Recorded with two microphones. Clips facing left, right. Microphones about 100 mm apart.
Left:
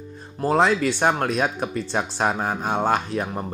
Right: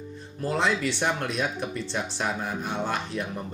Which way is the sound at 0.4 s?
45° left (ahead or behind).